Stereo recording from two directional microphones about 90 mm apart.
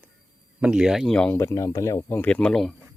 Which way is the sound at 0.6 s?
10° right (ahead or behind).